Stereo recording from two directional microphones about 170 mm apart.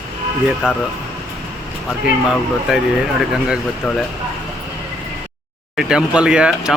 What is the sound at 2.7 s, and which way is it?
Speech, 5° right (ahead or behind).